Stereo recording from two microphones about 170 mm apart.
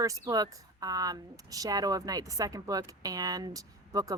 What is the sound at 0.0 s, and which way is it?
Speech, 20° right (ahead or behind).